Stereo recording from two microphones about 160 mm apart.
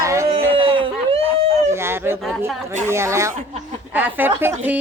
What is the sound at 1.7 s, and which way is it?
Speech, 15° right (ahead or behind).